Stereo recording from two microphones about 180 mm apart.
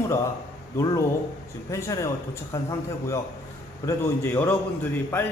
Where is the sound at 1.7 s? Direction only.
15° left (ahead or behind).